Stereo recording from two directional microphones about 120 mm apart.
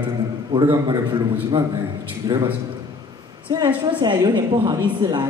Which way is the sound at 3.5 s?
35° right (ahead or behind).